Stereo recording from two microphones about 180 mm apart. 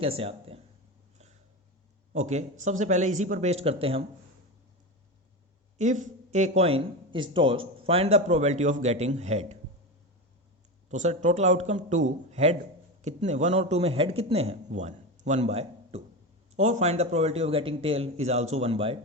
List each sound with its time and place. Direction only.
0.0 s speech: 30° right (ahead or behind)
2.1 s a man's voice: 40° right (ahead or behind)
5.7 s a man's voice: 40° right (ahead or behind)
10.8 s a man's voice: 40° right (ahead or behind)